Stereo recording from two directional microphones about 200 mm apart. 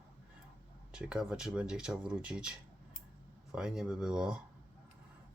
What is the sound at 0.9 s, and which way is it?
Speech, 5° right (ahead or behind).